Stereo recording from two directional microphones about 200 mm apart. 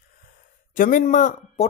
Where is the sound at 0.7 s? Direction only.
40° left (ahead or behind).